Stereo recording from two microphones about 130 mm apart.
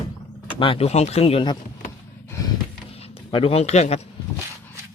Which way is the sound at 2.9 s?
50° left (ahead or behind).